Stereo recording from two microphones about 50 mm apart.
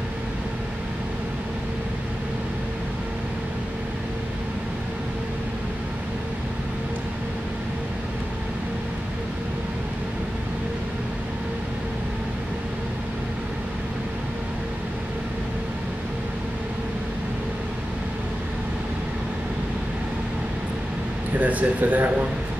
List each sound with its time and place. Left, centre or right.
21.4 s speech: right